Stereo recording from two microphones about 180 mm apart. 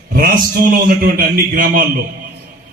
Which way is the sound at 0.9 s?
50° right (ahead or behind).